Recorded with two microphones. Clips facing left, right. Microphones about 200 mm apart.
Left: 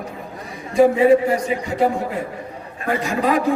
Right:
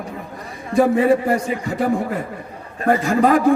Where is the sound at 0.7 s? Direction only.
50° right (ahead or behind).